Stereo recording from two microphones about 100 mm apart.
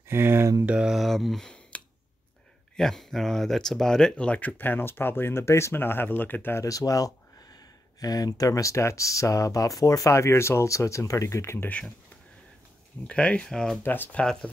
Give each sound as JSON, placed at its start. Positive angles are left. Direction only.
{"t": 0.1, "sound": "speech", "side_deg": -25}
{"t": 0.7, "sound": "speech", "side_deg": -10}
{"t": 2.8, "sound": "speech", "side_deg": 5}
{"t": 6.6, "sound": "speech", "side_deg": 35}
{"t": 13.0, "sound": "speech", "side_deg": 10}
{"t": 13.8, "sound": "speech", "side_deg": 20}
{"t": 14.2, "sound": "speech", "side_deg": 5}